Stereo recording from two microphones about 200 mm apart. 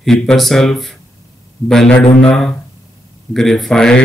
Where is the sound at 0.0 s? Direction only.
Centre (ahead or behind).